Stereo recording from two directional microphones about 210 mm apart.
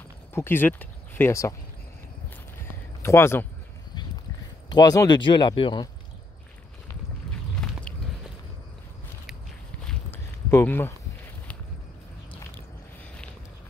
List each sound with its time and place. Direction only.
0.3 s speech: 10° left (ahead or behind)
3.0 s speech: 10° left (ahead or behind)
4.6 s speech: 20° left (ahead or behind)
9.8 s a sound: 10° left (ahead or behind)
12.3 s biting: 15° left (ahead or behind)